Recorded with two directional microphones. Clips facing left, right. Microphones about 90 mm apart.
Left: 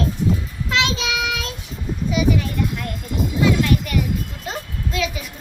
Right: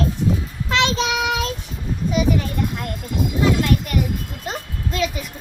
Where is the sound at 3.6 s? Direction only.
40° right (ahead or behind).